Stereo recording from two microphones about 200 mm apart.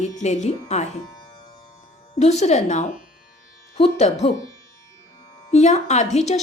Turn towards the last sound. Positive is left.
turn(degrees=35)  # may be behind; listen again after turning